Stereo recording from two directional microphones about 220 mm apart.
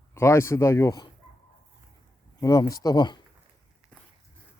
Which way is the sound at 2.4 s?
15° left (ahead or behind).